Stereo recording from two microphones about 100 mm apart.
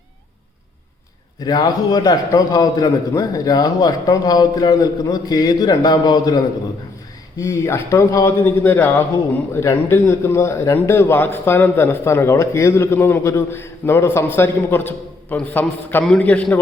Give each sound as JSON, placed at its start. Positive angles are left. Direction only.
{"t": 1.5, "sound": "a man's voice", "side_deg": 40}
{"t": 7.3, "sound": "a man's voice", "side_deg": 30}